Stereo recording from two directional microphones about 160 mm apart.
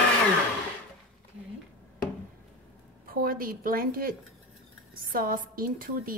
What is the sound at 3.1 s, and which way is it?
A woman's voice, 65° right (ahead or behind).